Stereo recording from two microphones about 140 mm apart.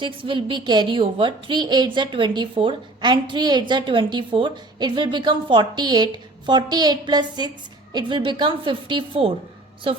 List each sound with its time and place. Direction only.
0.0 s a woman's voice: 35° right (ahead or behind)